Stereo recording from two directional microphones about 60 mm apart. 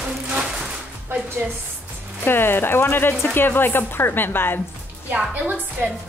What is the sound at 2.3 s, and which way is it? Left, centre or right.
Speech, left.